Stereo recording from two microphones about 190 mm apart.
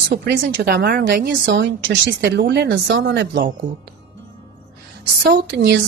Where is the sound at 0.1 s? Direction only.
60° right (ahead or behind).